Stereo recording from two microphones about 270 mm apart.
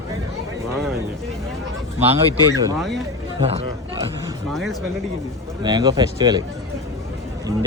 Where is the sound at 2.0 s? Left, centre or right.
Centre.